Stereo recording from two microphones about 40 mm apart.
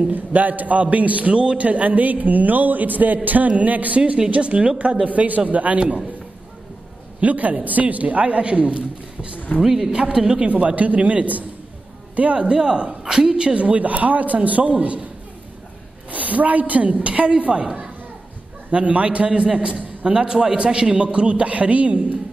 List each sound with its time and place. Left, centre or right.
0.1 s a man's voice: right
4.3 s speech: right
7.2 s a woman's voice: right
9.6 s a woman's voice: centre
9.9 s a man's voice: right
10.5 s speech: right
12.4 s a man's voice: right
13.5 s speech: right
16.1 s a woman's voice: right
17.5 s a man's voice: centre
18.7 s a man's voice: right